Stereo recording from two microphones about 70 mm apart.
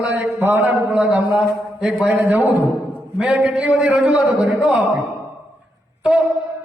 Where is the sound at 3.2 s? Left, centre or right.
Centre.